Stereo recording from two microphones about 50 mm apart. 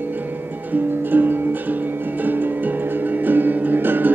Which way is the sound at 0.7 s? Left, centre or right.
Right.